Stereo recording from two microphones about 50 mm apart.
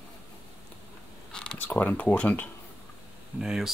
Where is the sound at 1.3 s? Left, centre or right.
Centre.